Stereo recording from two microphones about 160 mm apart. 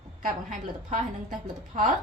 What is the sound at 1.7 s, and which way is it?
Speech, 50° right (ahead or behind).